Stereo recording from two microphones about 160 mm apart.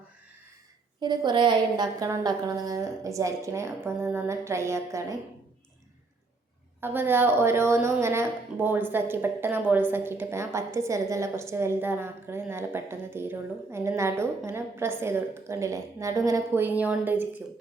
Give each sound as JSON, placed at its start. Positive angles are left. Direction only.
{"t": 1.0, "sound": "a woman's voice", "side_deg": -25}
{"t": 6.8, "sound": "a woman's voice", "side_deg": -15}